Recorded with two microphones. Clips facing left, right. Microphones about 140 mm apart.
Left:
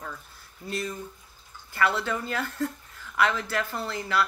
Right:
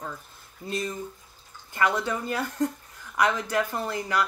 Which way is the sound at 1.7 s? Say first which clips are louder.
Right 1 dB; 15° right (ahead or behind).